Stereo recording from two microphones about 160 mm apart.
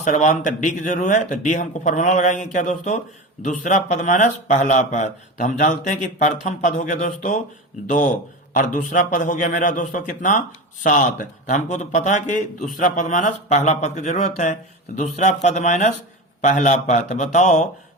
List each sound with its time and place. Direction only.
0.0 s a man's voice: 50° left (ahead or behind)